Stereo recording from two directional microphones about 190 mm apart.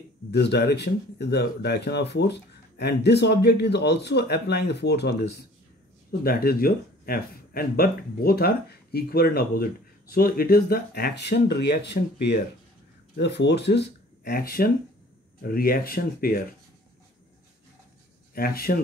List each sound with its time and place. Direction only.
0.3 s speech: 60° left (ahead or behind)
6.2 s speech: 50° left (ahead or behind)
18.3 s speech: 50° left (ahead or behind)